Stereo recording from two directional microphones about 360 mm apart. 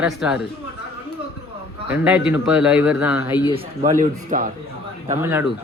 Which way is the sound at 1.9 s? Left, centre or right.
Centre.